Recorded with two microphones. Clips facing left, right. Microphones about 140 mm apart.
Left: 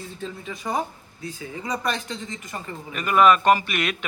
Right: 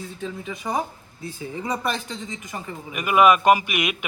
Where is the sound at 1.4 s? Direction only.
30° right (ahead or behind).